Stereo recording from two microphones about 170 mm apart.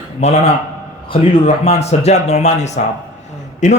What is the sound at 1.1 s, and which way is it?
A man's voice, 35° left (ahead or behind).